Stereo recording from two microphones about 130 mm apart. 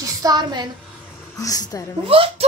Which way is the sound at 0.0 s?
30° right (ahead or behind).